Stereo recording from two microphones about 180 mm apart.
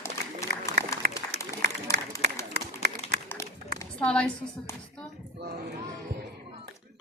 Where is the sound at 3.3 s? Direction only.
15° left (ahead or behind).